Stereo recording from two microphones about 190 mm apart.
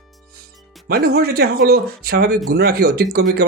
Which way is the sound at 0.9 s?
55° right (ahead or behind).